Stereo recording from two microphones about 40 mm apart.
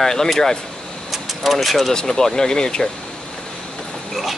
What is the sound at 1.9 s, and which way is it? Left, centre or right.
Speech, centre.